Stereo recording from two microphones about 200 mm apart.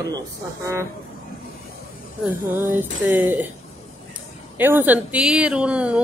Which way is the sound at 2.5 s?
10° right (ahead or behind).